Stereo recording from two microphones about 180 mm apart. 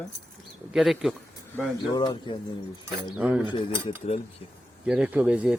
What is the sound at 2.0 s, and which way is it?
Speech, 25° left (ahead or behind).